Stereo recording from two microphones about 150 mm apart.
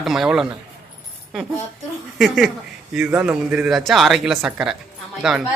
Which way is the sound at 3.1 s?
10° right (ahead or behind).